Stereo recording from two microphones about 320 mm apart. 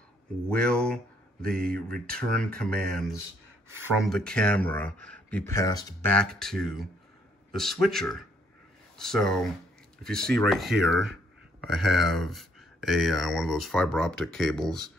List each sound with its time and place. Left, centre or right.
0.5 s speech: centre
1.4 s speech: right
1.7 s speech: centre
3.8 s speech: centre